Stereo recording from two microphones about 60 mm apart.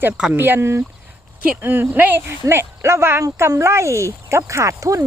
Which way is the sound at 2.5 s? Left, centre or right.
Right.